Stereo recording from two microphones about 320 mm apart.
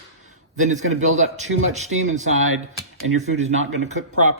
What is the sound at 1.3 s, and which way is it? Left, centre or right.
Speech, right.